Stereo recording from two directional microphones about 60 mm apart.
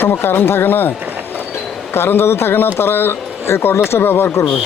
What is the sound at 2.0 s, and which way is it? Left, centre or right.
Speech, left.